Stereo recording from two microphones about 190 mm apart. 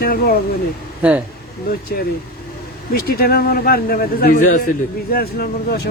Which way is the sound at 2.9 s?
55° left (ahead or behind).